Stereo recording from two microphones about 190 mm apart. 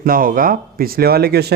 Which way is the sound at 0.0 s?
50° right (ahead or behind).